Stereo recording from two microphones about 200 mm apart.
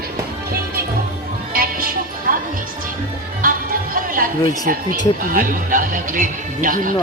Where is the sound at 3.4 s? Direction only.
45° right (ahead or behind).